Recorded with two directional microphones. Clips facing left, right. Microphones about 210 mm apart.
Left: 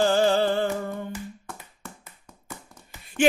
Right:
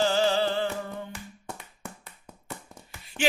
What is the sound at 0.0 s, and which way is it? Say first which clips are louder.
Music: left 4 dB; 50° left (ahead or behind).